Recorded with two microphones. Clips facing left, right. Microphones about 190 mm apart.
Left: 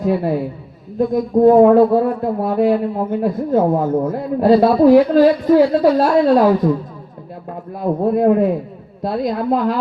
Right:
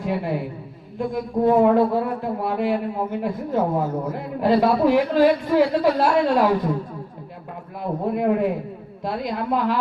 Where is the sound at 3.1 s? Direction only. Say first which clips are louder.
Left 9 dB; 50° left (ahead or behind).